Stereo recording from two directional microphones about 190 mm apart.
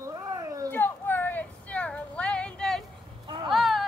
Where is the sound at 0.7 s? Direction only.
10° left (ahead or behind).